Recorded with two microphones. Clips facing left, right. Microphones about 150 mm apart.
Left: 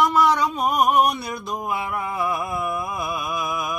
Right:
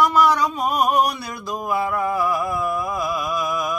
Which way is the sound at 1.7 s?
20° left (ahead or behind).